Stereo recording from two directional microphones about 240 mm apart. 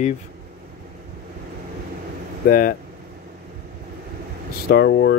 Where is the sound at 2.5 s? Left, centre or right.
Left.